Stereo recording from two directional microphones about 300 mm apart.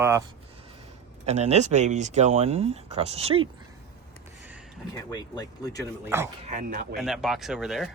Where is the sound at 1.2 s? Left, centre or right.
Right.